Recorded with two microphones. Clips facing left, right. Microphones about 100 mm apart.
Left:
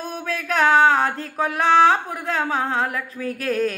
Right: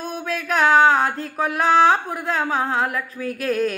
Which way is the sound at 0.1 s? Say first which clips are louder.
Right 1 dB; 40° left (ahead or behind).